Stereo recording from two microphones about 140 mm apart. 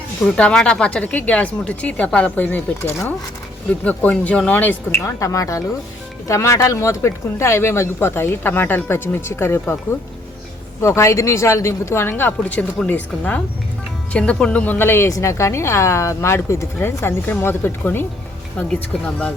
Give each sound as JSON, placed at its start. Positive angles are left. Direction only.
{"t": 0.3, "sound": "speech", "side_deg": 5}
{"t": 10.8, "sound": "speech", "side_deg": 20}